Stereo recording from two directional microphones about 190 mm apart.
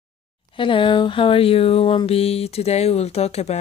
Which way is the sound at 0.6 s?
25° left (ahead or behind).